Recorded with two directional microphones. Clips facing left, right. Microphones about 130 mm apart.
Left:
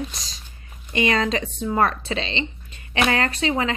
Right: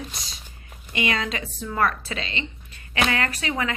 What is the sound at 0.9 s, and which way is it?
A woman's voice, 35° left (ahead or behind).